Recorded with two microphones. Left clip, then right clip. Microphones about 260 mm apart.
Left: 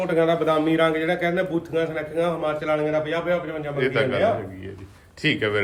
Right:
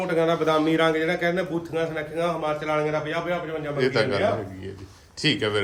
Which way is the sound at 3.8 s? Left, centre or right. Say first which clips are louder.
Left 1 dB; centre.